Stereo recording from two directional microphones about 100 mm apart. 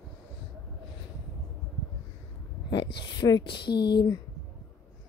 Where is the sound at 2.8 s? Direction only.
45° left (ahead or behind).